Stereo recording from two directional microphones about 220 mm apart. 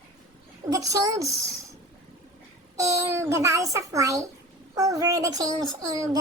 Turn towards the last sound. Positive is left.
turn(degrees=-15)  # may be behind; listen again after turning